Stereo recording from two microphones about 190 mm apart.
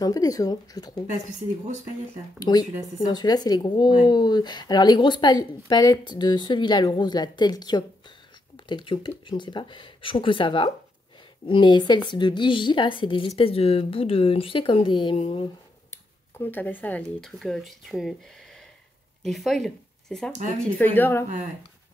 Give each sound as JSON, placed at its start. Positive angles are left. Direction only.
{"t": 0.0, "sound": "a woman's voice", "side_deg": 20}
{"t": 2.3, "sound": "a woman's voice", "side_deg": 20}
{"t": 15.9, "sound": "speech", "side_deg": 10}
{"t": 19.2, "sound": "speech", "side_deg": 0}